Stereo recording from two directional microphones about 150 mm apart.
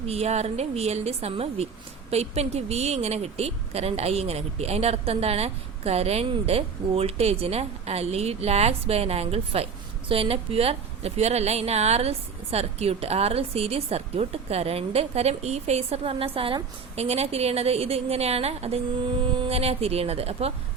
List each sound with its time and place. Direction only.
0.1 s a woman's voice: 45° right (ahead or behind)